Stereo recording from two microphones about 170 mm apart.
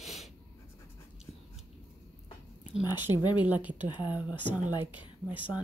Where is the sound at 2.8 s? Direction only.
25° left (ahead or behind).